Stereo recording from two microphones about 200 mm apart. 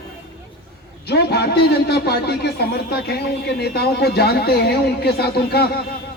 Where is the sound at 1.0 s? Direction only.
55° left (ahead or behind).